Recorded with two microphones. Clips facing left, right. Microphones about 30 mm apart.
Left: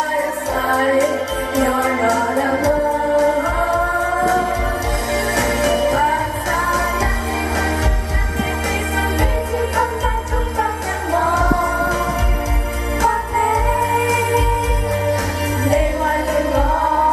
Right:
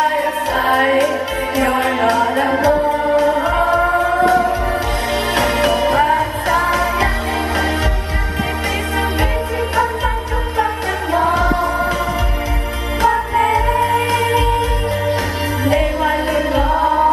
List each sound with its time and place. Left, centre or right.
0.0 s music: right
6.7 s music: right
11.1 s music: right
13.0 s music: right
15.6 s music: right